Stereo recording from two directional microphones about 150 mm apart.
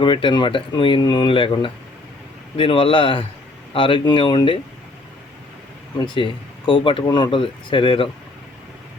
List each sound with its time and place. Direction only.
0.0 s speech: 35° left (ahead or behind)
6.0 s speech: 35° left (ahead or behind)